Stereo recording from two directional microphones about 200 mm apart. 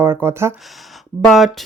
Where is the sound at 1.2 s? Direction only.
Centre (ahead or behind).